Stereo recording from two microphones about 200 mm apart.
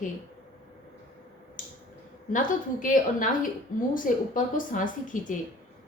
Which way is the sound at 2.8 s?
40° left (ahead or behind).